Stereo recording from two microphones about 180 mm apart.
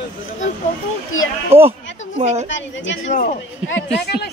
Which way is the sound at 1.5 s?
15° right (ahead or behind).